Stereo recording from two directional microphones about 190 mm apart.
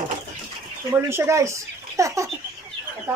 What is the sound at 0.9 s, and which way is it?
Speech, 15° right (ahead or behind).